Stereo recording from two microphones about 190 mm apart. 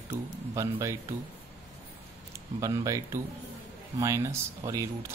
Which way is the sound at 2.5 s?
20° right (ahead or behind).